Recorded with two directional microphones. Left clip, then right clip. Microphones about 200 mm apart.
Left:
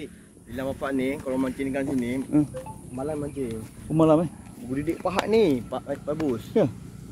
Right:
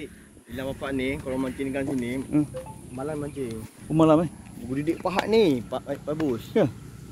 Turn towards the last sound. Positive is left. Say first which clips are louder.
# even
turn(degrees=-50)  # may be behind; listen again after turning